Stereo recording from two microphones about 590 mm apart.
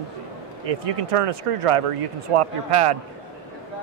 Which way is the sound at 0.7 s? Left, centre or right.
Right.